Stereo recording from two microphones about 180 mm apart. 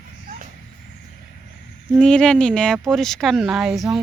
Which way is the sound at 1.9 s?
5° left (ahead or behind).